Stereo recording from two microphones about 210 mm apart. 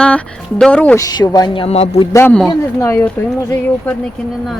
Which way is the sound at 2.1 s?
5° left (ahead or behind).